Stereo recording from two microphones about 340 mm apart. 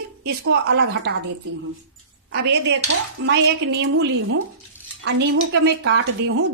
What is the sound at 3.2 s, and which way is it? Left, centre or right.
A woman's voice, right.